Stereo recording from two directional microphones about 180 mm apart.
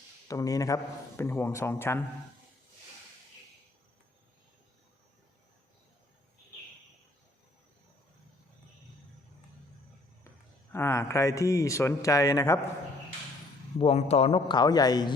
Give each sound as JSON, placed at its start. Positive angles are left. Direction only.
{"t": 0.3, "sound": "speech", "side_deg": 20}
{"t": 10.7, "sound": "speech", "side_deg": 15}
{"t": 13.7, "sound": "a man's voice", "side_deg": 35}